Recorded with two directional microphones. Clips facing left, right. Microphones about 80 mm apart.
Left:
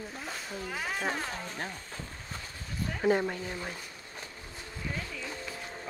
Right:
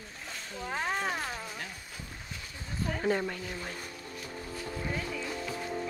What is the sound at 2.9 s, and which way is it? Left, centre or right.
Speech, centre.